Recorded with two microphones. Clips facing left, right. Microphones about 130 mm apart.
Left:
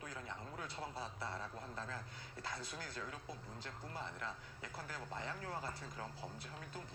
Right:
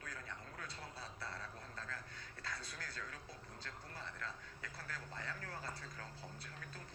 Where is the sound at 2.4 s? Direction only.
20° left (ahead or behind).